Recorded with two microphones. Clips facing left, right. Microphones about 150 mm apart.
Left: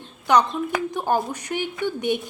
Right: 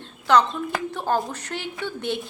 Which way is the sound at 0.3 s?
15° left (ahead or behind).